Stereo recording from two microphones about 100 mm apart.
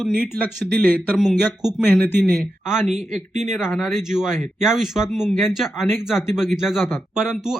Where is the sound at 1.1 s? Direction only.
Centre (ahead or behind).